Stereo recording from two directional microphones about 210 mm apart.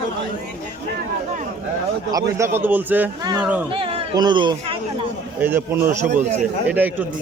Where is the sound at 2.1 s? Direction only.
15° right (ahead or behind).